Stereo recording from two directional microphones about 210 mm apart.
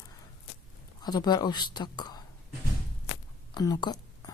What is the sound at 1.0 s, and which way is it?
Speech, 20° left (ahead or behind).